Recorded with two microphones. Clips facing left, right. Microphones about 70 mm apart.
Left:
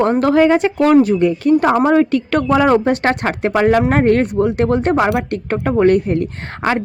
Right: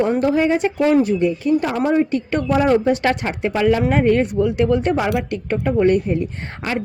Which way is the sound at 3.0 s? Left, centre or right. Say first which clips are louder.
Left 3 dB; left.